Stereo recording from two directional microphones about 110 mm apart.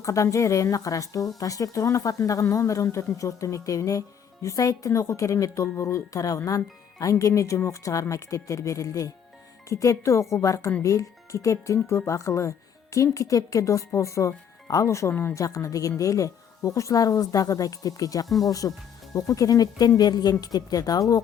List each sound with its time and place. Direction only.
0.0 s a woman's voice: 30° left (ahead or behind)
18.3 s speech: centre (ahead or behind)
19.1 s a woman's voice: 30° left (ahead or behind)